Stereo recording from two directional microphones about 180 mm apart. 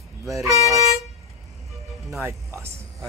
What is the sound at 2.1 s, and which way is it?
Speech, 15° right (ahead or behind).